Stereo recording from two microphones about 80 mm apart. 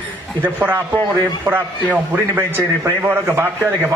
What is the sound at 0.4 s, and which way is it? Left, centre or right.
A man's voice, right.